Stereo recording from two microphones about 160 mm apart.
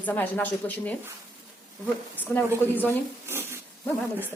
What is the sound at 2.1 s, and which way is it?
Speech, 10° left (ahead or behind).